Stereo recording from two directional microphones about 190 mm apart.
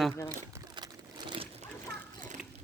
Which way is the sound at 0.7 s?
25° right (ahead or behind).